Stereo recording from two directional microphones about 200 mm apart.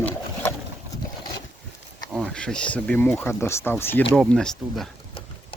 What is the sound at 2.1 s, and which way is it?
Speech, 5° left (ahead or behind).